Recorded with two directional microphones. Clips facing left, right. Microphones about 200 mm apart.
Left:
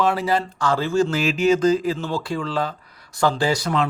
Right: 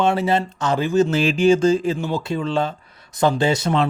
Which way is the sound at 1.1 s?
30° right (ahead or behind).